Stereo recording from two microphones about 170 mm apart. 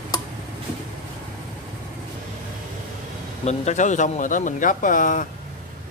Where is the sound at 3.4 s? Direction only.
45° left (ahead or behind).